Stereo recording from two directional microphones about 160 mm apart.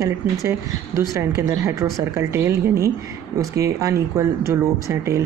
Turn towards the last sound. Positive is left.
turn(degrees=-20)  # may be behind; listen again after turning